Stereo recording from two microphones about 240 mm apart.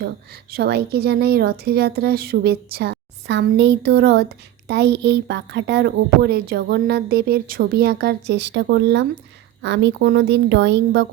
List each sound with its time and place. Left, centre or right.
0.5 s speech: right